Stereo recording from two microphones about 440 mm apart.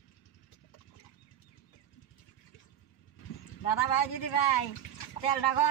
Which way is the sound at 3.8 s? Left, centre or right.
Left.